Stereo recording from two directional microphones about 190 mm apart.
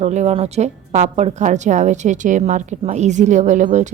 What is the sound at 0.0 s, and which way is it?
A woman's voice, 35° right (ahead or behind).